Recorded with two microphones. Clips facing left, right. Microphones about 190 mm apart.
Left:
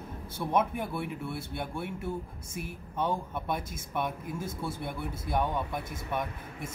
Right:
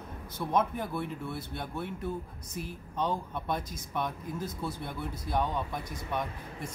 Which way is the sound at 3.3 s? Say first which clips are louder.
Even; 5° left (ahead or behind).